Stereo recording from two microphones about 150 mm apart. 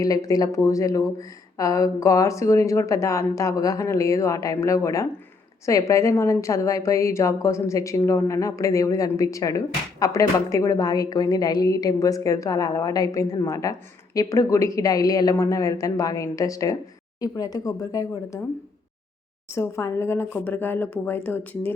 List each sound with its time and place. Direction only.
0.0 s a woman's voice: 25° left (ahead or behind)
19.5 s speech: 20° left (ahead or behind)